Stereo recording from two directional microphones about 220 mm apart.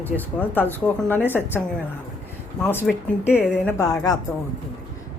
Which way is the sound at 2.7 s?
10° left (ahead or behind).